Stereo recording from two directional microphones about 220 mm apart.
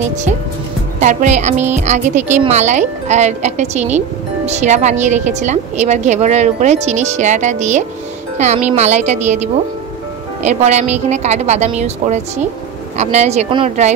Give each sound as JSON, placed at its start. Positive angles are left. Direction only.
{"t": 1.0, "sound": "a woman's voice", "side_deg": -35}